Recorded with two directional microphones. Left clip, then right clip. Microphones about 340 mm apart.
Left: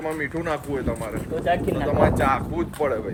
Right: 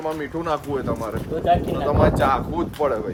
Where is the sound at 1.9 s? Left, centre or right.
Centre.